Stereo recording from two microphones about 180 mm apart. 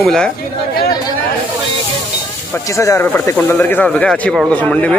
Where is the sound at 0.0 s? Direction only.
5° left (ahead or behind).